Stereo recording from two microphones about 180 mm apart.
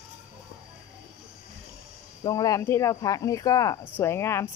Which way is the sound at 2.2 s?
20° left (ahead or behind).